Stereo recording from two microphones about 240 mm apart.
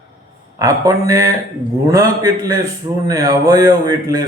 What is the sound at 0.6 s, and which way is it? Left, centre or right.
Speech, centre.